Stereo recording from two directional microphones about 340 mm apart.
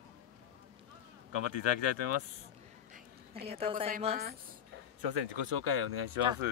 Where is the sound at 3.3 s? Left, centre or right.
Centre.